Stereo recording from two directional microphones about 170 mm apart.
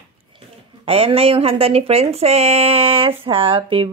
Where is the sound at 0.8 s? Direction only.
35° right (ahead or behind).